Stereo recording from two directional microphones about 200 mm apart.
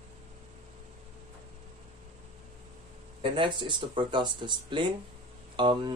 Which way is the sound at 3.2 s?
25° right (ahead or behind).